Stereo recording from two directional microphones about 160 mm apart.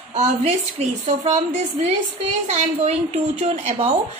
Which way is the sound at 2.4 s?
45° right (ahead or behind).